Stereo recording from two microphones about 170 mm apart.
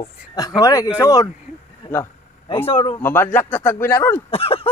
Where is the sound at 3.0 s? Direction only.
10° left (ahead or behind).